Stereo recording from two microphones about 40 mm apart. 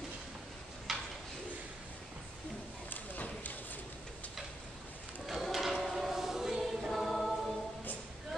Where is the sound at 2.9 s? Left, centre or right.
Left.